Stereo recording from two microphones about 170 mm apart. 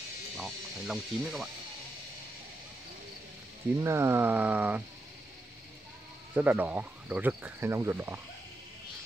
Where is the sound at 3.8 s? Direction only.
15° right (ahead or behind).